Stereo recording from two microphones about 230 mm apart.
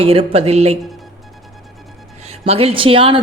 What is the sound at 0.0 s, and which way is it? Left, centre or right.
Speech, right.